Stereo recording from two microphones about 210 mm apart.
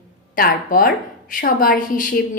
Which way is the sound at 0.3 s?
40° left (ahead or behind).